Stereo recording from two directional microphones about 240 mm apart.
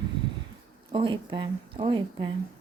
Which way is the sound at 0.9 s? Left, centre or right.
Right.